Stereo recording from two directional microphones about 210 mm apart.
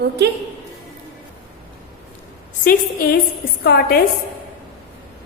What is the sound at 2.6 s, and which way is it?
A woman's voice, 45° left (ahead or behind).